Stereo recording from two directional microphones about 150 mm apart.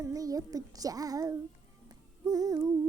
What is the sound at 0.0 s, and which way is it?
A woman's voice, 25° right (ahead or behind).